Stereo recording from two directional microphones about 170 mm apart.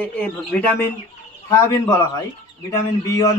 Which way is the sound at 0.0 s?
10° left (ahead or behind).